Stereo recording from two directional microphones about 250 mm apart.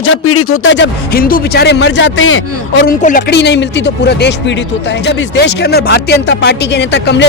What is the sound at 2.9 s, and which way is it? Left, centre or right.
Speech, left.